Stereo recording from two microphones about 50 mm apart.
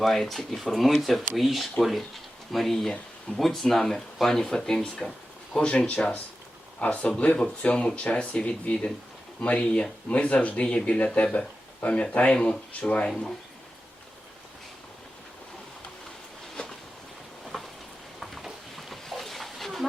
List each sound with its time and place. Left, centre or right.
0.0 s a man's voice: centre
17.5 s train: centre
18.2 s a sound: centre